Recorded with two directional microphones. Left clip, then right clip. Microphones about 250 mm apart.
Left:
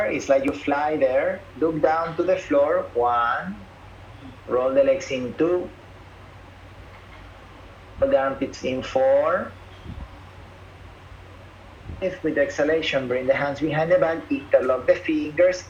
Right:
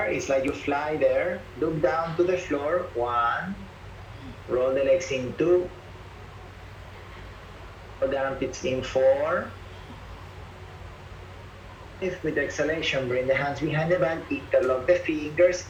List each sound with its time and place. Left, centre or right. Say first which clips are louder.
0.0 s speech: left 4 dB; centre
4.6 s speech: left 3 dB; centre
8.1 s speech: left 6 dB; centre
11.9 s speech: left 5 dB; centre